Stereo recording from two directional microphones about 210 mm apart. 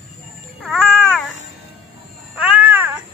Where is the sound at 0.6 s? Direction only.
Centre (ahead or behind).